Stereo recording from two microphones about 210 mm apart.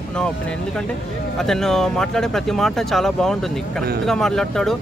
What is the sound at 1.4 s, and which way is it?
Speech, centre (ahead or behind).